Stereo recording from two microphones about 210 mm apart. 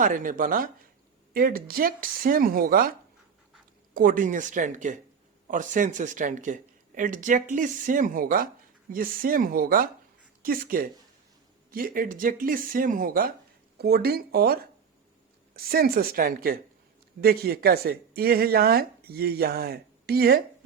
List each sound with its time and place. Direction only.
0.0 s speech: 40° right (ahead or behind)
3.9 s speech: 40° right (ahead or behind)